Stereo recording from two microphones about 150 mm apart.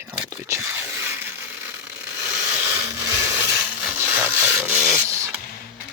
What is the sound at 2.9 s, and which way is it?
Blender, 20° right (ahead or behind).